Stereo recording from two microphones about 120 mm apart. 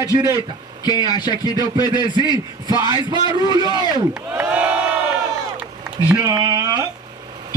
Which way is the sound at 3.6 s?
40° left (ahead or behind).